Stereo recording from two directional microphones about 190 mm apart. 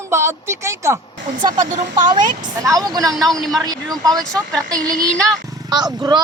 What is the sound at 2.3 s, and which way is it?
Speech, 20° right (ahead or behind).